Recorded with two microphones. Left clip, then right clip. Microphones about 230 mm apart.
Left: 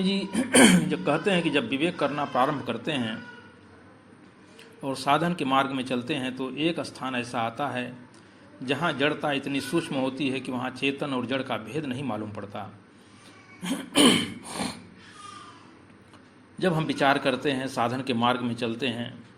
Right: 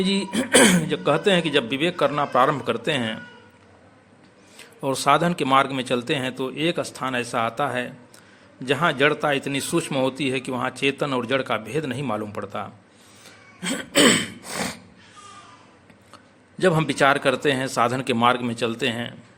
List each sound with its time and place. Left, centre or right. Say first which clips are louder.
0.0 s a man's voice: right 4 dB; right
4.8 s a man's voice: right 5 dB; right
13.6 s cough: right 5 dB; right
14.0 s a man's voice: right 3 dB; right
16.6 s a man's voice: right 6 dB; right